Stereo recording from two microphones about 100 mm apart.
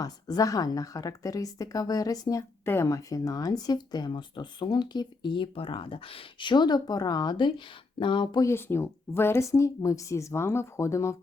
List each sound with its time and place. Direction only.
0.0 s a woman's voice: 40° left (ahead or behind); by 8.4 s 55° left (ahead or behind)
8.4 s a woman's voice: 25° left (ahead or behind)